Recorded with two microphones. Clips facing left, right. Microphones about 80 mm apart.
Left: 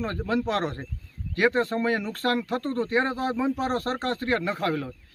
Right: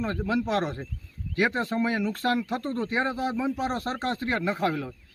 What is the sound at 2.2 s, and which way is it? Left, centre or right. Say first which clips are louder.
Speech: left 3 dB; left.